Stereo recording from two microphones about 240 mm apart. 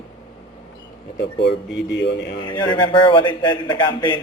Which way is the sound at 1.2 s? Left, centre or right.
Left.